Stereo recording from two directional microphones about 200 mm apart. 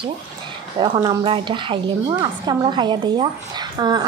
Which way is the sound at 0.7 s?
20° right (ahead or behind).